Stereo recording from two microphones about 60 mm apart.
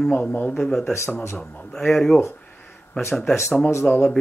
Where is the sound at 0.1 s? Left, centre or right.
Left.